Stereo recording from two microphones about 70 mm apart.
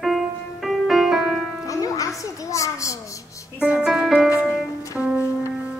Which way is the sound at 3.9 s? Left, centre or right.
Centre.